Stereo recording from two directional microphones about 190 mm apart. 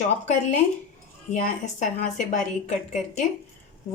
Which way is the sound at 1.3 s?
40° left (ahead or behind).